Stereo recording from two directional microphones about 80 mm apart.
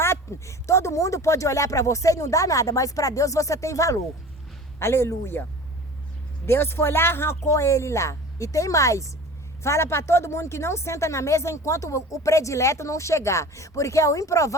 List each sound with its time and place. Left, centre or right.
0.0 s speech: left